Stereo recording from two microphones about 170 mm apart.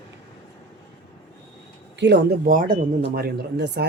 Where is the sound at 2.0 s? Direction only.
90° right.